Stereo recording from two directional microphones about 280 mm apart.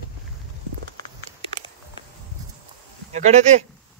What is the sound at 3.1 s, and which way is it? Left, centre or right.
Speech, right.